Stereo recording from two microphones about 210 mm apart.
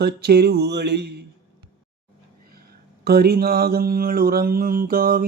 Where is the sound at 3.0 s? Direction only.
50° right (ahead or behind).